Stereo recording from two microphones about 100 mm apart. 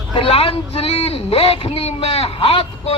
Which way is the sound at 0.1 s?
65° left (ahead or behind).